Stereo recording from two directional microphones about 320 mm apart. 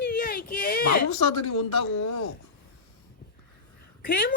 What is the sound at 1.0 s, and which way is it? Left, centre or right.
Speech, left.